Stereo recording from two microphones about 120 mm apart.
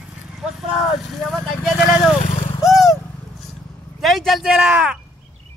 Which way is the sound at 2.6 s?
Centre (ahead or behind).